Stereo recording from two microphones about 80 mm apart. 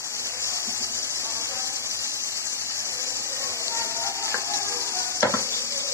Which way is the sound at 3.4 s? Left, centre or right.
Left.